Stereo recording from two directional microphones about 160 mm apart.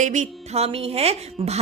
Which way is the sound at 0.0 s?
50° right (ahead or behind).